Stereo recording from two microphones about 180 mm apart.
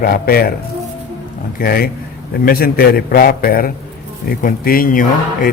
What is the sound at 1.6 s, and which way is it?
A man's voice, 55° left (ahead or behind).